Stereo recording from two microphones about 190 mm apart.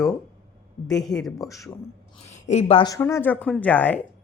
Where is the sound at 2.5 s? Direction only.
35° left (ahead or behind).